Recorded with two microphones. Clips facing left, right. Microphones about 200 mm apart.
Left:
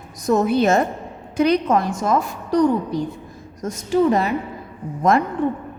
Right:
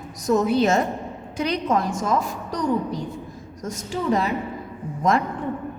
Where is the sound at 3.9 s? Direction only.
60° left (ahead or behind).